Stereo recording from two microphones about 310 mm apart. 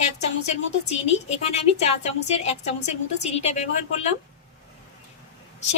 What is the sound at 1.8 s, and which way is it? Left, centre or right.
A woman's voice, left.